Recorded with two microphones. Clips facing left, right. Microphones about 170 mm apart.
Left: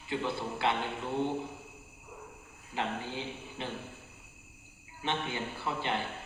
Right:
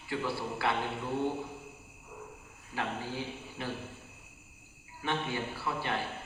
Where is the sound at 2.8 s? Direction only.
20° left (ahead or behind).